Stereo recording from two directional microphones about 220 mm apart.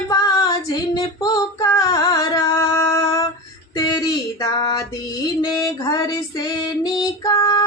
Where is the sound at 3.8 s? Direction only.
15° left (ahead or behind).